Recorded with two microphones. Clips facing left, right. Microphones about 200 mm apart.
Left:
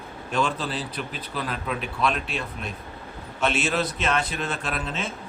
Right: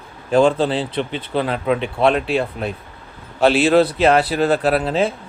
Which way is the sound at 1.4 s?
80° right.